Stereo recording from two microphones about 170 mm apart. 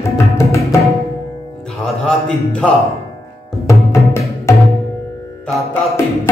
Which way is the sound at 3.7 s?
15° left (ahead or behind).